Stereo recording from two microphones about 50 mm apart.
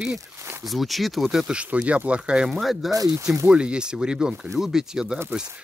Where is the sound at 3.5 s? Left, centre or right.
Centre.